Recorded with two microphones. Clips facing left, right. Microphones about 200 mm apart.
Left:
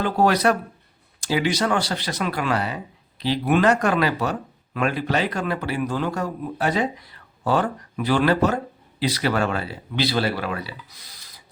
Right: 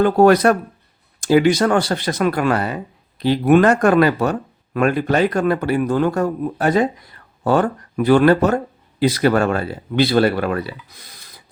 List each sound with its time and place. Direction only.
0.0 s speech: 50° right (ahead or behind)